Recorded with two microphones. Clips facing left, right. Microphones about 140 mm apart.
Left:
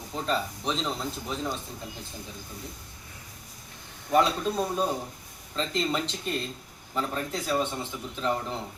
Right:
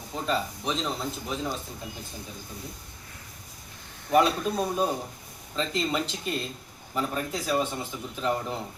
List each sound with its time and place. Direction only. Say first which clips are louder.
0.1 s speech: even; centre (ahead or behind)
4.1 s a man's voice: right 1 dB; 5° right (ahead or behind)